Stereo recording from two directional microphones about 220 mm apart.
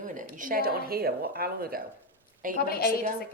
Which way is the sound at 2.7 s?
45° left (ahead or behind).